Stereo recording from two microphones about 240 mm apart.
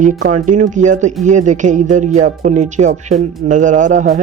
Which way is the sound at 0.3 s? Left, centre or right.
Right.